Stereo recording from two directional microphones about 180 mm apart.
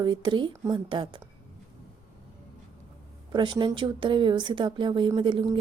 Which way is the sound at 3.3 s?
25° right (ahead or behind).